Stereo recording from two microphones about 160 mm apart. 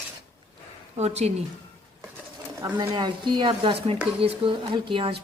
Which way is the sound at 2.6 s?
30° right (ahead or behind).